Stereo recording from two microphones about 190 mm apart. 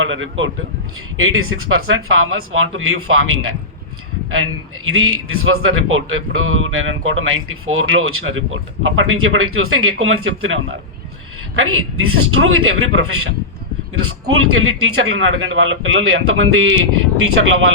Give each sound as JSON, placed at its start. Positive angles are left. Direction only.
{"t": 0.0, "sound": "a man's voice", "side_deg": -90}
{"t": 4.9, "sound": "a man's voice", "side_deg": -90}